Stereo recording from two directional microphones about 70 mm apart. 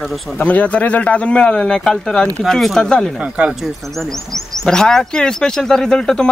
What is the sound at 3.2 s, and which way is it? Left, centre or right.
Speech, right.